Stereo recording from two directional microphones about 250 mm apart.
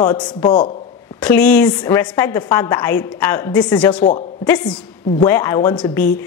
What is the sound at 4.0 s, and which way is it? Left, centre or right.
Speech, left.